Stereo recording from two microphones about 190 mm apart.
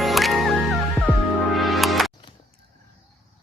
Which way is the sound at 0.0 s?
Centre (ahead or behind).